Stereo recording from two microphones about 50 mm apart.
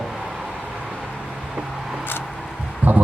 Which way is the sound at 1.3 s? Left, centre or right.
Centre.